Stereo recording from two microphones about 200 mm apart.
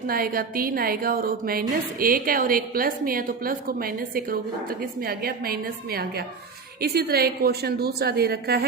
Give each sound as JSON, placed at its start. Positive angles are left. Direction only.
{"t": 0.1, "sound": "a woman's voice", "side_deg": -45}